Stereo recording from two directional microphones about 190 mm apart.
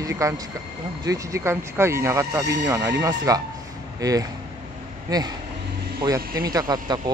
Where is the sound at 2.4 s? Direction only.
65° right (ahead or behind).